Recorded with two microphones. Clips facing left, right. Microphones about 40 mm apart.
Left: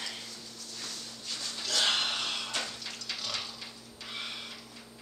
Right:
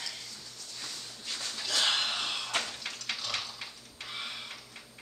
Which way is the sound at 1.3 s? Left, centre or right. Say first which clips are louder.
Right 1 dB; right.